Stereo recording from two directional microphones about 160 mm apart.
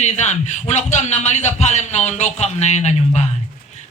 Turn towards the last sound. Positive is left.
turn(degrees=45)  # may be behind; listen again after turning